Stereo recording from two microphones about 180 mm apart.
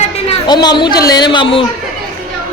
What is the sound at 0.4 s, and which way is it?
A woman's voice, 25° left (ahead or behind).